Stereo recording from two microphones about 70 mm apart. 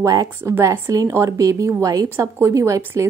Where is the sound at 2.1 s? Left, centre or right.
Right.